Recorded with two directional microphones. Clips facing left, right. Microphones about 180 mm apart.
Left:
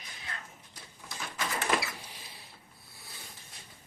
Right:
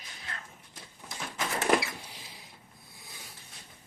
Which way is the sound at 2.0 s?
10° right (ahead or behind).